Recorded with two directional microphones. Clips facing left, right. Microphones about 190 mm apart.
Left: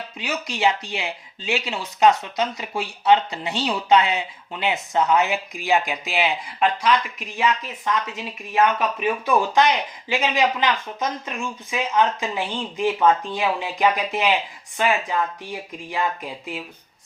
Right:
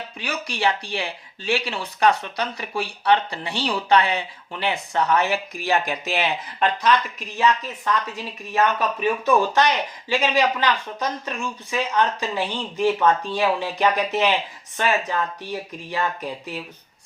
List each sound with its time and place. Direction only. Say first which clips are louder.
0.3 s speech: left 2 dB; 20° left (ahead or behind)